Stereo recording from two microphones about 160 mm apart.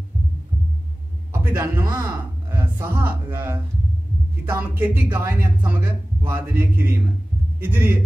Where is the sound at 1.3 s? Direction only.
15° right (ahead or behind).